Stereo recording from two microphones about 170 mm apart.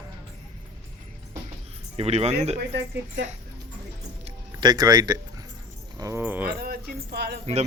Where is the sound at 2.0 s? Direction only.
40° right (ahead or behind).